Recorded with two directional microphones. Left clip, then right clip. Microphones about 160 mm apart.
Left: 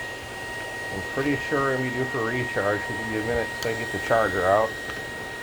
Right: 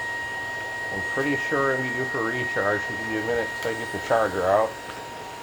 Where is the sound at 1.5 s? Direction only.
35° left (ahead or behind).